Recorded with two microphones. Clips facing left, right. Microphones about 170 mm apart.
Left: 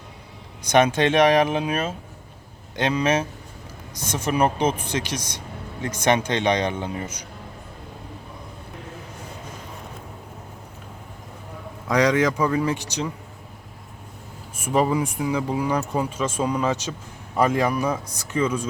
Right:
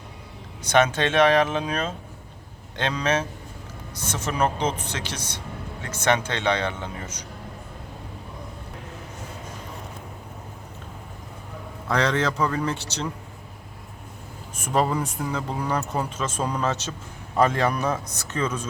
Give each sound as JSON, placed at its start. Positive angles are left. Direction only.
{"t": 0.7, "sound": "speech", "side_deg": 15}
{"t": 11.9, "sound": "speech", "side_deg": 15}
{"t": 14.5, "sound": "speech", "side_deg": 10}